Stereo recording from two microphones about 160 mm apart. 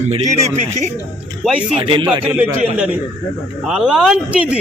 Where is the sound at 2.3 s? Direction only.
15° right (ahead or behind).